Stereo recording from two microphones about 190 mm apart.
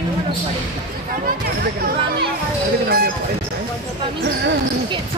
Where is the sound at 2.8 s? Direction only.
50° right (ahead or behind).